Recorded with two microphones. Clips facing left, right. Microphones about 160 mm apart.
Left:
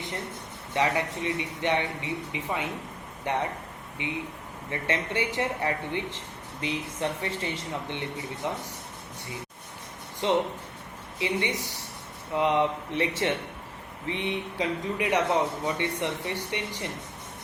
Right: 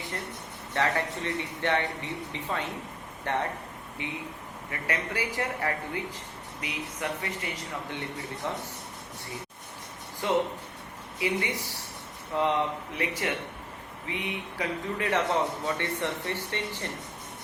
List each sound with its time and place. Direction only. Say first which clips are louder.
0.7 s speech: left 2 dB; 15° left (ahead or behind)
10.2 s speech: left 1 dB; 20° left (ahead or behind)
14.9 s speech: left 2 dB; 15° left (ahead or behind)